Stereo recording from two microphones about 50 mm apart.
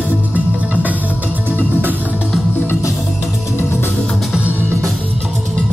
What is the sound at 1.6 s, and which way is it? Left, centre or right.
Music, right.